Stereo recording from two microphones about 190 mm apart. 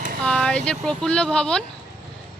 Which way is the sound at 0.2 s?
5° left (ahead or behind).